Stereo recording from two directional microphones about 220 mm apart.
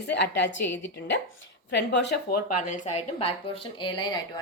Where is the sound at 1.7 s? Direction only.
50° left (ahead or behind).